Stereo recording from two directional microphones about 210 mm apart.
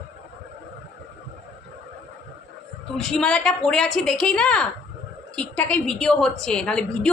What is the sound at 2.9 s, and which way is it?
A woman's voice, 5° left (ahead or behind).